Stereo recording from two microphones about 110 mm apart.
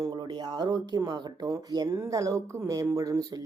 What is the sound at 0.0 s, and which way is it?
Speech, 40° right (ahead or behind).